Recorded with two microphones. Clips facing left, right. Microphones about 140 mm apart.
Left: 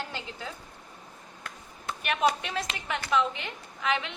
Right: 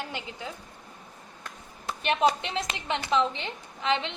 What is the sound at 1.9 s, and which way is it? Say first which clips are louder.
A woman's voice: right 2 dB; 30° right (ahead or behind).